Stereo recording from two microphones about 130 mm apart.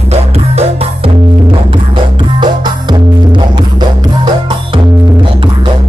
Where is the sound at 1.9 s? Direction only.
35° right (ahead or behind).